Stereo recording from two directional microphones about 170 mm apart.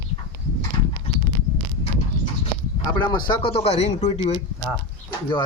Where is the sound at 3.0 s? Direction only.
25° left (ahead or behind).